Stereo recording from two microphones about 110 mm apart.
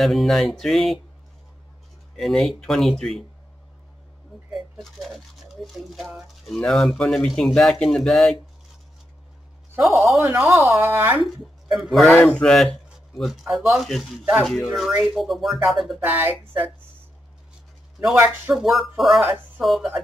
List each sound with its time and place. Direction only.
0.0 s speech: centre (ahead or behind)
2.1 s speech: centre (ahead or behind)
4.5 s speech: centre (ahead or behind)
10.1 s speech: 25° right (ahead or behind)
11.2 s speech: centre (ahead or behind)
12.1 s speech: 15° left (ahead or behind); by 16.0 s centre (ahead or behind)
16.0 s speech: 20° right (ahead or behind)
18.2 s speech: 5° right (ahead or behind)